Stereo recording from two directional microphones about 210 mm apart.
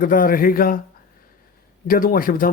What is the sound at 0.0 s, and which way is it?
Speech, 40° left (ahead or behind).